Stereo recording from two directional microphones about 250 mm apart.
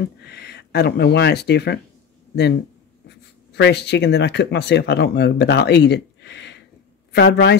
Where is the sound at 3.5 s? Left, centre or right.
Left.